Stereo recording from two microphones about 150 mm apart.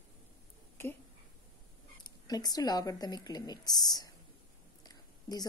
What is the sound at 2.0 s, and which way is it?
Speech, 25° left (ahead or behind).